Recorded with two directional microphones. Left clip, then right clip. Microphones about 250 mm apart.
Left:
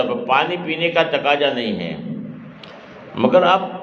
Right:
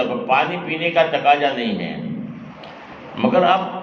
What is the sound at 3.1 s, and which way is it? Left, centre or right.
Speech, left.